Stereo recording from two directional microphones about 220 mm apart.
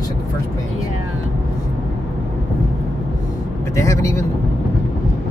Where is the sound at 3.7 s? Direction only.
15° left (ahead or behind).